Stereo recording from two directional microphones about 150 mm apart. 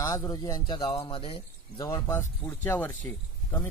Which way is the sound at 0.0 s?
25° left (ahead or behind).